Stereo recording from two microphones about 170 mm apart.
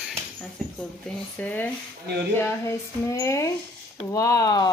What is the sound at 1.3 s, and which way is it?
Speech, 10° left (ahead or behind).